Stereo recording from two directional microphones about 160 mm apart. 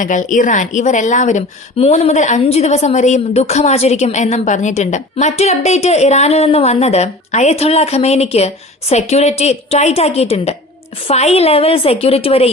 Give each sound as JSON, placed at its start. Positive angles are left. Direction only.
{"t": 0.0, "sound": "a woman's voice", "side_deg": 55}